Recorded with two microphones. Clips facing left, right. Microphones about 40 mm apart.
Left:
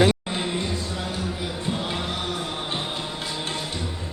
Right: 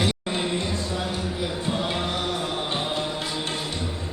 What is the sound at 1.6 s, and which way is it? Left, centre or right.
Music, centre.